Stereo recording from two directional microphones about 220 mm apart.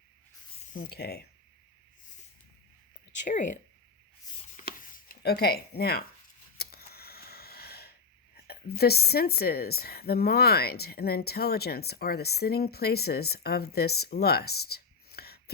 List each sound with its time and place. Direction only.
0.7 s speech: 40° left (ahead or behind)
3.2 s speech: 35° left (ahead or behind)
4.5 s a sound: 40° left (ahead or behind)
8.4 s speech: 45° left (ahead or behind)